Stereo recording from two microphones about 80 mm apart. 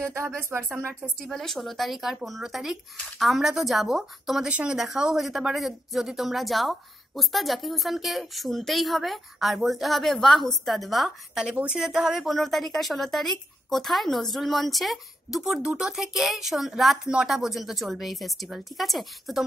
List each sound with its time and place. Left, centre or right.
0.0 s speech: right
1.0 s speech: centre
4.5 s speech: centre
11.5 s speech: centre